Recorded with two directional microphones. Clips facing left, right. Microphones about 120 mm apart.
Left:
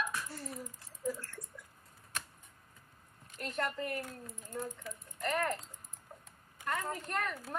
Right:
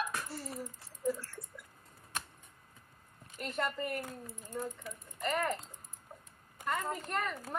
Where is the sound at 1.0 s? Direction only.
5° right (ahead or behind).